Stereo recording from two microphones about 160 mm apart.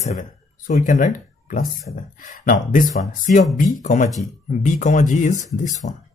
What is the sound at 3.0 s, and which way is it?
Speech, 65° left (ahead or behind).